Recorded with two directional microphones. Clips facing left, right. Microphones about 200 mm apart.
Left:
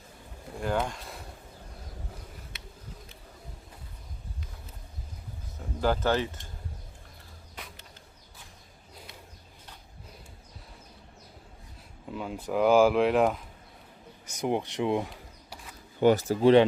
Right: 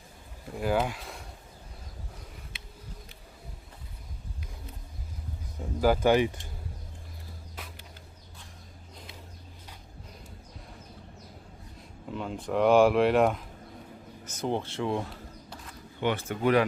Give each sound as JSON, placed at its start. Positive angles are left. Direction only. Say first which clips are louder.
{"t": 0.6, "sound": "speech", "louder": "right 2 dB", "side_deg": -5}
{"t": 5.8, "sound": "speech", "louder": "right 4 dB", "side_deg": -10}
{"t": 7.6, "sound": "a sound", "louder": "even", "side_deg": -5}
{"t": 12.1, "sound": "speech", "louder": "even", "side_deg": 5}
{"t": 14.3, "sound": "speech", "louder": "left 2 dB", "side_deg": 15}
{"t": 16.0, "sound": "speech", "louder": "left 7 dB", "side_deg": 40}